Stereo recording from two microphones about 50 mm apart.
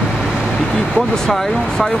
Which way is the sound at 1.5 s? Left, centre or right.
Centre.